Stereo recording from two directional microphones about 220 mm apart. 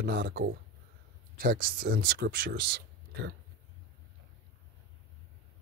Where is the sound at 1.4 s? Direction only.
40° right (ahead or behind).